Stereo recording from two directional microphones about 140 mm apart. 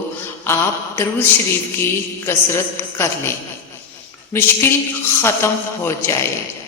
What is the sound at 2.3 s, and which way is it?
A woman's voice, 20° left (ahead or behind).